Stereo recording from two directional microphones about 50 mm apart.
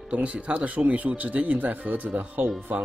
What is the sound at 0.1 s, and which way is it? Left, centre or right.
Speech, right.